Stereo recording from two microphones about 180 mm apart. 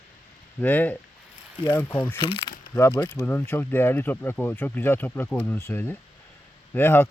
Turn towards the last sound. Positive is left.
turn(degrees=10)  # may be behind; listen again after turning